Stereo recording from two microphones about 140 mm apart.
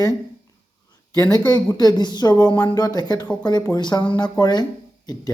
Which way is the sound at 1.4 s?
30° left (ahead or behind).